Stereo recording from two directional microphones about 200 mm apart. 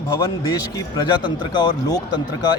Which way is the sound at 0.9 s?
20° left (ahead or behind).